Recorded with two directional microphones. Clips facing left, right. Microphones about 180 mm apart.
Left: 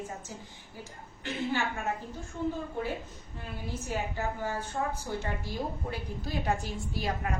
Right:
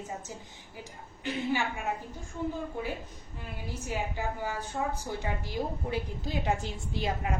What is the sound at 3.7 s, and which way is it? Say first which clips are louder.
A woman's voice: even; 15° right (ahead or behind).